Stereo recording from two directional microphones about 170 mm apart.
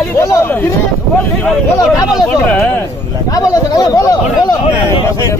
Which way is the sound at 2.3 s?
5° left (ahead or behind).